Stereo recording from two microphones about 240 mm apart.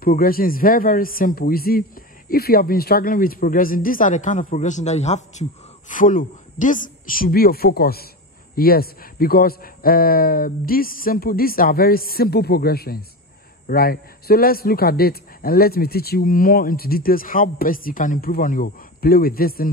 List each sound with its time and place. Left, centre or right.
0.0 s speech: left